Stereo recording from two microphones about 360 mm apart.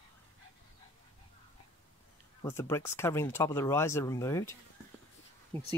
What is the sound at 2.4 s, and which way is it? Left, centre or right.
Speech, centre.